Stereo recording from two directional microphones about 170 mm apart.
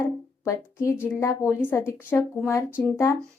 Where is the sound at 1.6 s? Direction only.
15° left (ahead or behind).